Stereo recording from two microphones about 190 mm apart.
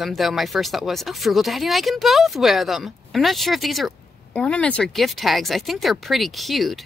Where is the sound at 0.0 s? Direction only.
Centre (ahead or behind).